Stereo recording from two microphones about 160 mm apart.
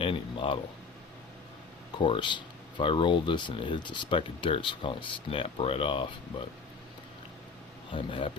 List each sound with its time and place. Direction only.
0.0 s speech: 30° left (ahead or behind)
2.0 s speech: 30° left (ahead or behind)
7.9 s speech: 35° left (ahead or behind)